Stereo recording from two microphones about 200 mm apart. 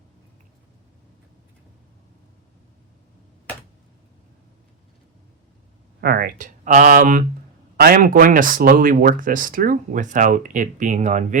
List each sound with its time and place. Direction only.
6.0 s speech: 50° right (ahead or behind)